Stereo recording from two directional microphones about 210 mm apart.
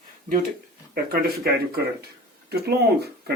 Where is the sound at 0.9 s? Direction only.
45° right (ahead or behind).